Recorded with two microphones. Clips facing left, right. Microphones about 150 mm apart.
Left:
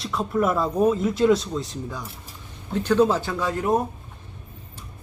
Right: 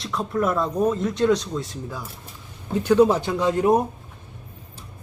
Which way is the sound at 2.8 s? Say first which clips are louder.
Right 3 dB; 10° right (ahead or behind).